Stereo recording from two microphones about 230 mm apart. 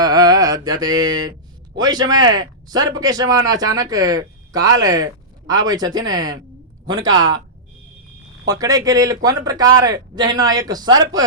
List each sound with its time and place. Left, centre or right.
0.0 s mantra: centre
1.7 s a man's voice: centre
8.4 s speech: centre